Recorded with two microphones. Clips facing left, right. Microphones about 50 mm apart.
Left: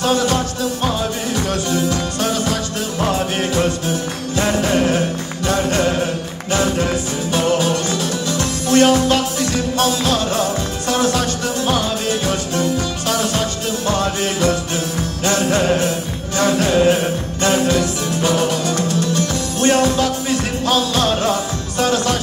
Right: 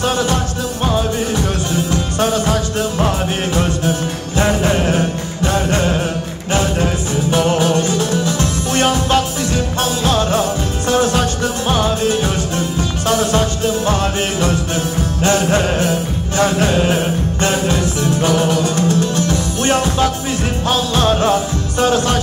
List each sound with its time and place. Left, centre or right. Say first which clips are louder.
2.1 s music: right 3 dB; right
4.4 s music: right 1 dB; right
7.2 s music: right 2 dB; right